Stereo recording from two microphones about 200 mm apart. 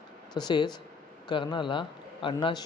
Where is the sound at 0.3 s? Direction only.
20° left (ahead or behind).